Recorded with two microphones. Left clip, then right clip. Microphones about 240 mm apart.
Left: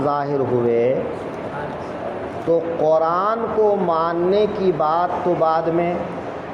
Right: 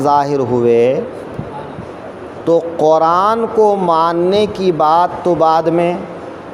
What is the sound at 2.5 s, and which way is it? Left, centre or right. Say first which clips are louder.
Speech: right 6 dB; right.